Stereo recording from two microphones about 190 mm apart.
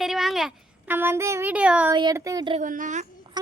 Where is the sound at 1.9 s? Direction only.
20° right (ahead or behind).